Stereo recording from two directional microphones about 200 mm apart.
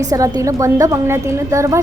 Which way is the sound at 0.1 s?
15° right (ahead or behind).